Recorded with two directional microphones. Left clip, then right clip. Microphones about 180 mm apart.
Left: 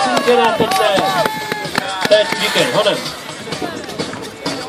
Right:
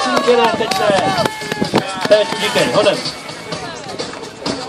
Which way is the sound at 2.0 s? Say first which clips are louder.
Left 1 dB; 35° right (ahead or behind).